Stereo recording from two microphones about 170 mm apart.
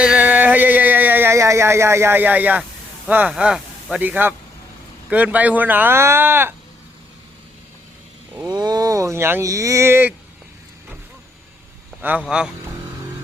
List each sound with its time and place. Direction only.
0.0 s a sound: 10° right (ahead or behind)
3.1 s a man's voice: 10° right (ahead or behind)
8.4 s speech: 25° right (ahead or behind)
12.0 s speech: 5° right (ahead or behind)